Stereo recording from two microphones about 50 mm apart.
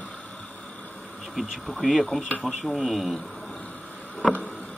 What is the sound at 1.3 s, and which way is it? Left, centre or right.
A man's voice, centre.